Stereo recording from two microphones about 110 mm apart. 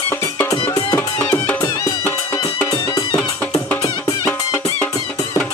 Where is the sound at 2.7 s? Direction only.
35° left (ahead or behind).